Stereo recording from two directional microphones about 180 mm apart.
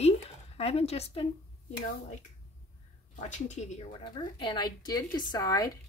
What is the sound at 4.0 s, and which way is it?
A woman's voice, 25° left (ahead or behind).